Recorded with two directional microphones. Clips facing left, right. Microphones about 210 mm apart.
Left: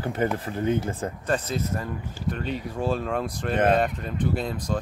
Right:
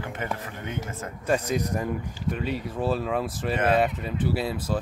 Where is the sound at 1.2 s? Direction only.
10° right (ahead or behind).